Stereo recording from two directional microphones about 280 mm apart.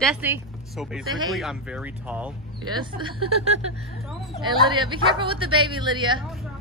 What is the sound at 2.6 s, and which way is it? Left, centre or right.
Speech, centre.